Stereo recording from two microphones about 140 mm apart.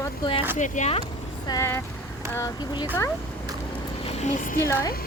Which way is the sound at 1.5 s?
20° left (ahead or behind).